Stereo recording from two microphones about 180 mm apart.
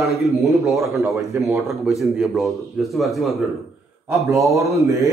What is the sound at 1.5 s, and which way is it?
Speech, centre (ahead or behind).